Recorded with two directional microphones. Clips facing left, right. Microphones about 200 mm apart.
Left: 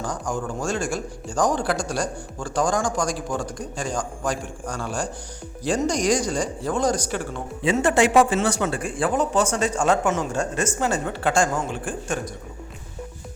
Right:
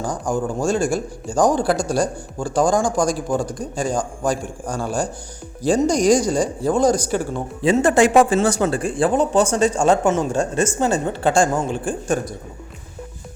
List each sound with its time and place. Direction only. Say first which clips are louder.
0.0 s speech: right 5 dB; 30° right (ahead or behind)